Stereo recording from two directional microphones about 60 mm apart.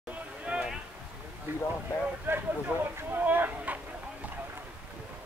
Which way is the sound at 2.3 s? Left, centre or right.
Right.